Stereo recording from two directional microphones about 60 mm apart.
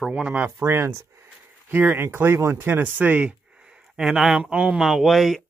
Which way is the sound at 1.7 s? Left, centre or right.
Right.